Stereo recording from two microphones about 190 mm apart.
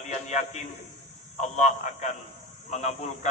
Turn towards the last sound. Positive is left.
turn(degrees=35)  # may be behind; listen again after turning